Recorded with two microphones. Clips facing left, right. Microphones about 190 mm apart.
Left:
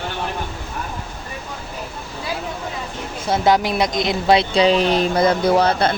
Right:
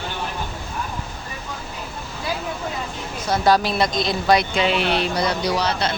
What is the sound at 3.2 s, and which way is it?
Speech, 20° left (ahead or behind).